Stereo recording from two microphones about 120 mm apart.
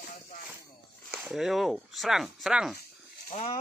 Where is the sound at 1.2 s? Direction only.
5° right (ahead or behind).